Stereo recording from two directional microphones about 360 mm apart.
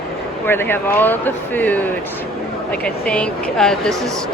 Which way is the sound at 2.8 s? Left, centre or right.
Centre.